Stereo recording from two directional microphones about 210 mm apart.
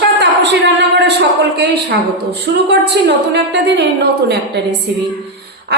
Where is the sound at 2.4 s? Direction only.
50° right (ahead or behind).